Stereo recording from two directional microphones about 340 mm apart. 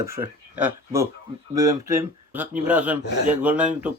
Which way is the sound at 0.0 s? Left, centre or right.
Centre.